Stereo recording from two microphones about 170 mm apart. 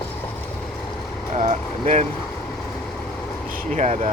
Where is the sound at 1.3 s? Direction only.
45° right (ahead or behind).